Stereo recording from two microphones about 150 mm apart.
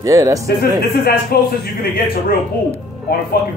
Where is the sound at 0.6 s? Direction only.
85° left.